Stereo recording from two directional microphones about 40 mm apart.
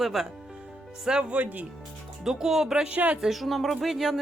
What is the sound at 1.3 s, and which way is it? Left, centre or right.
Music, right.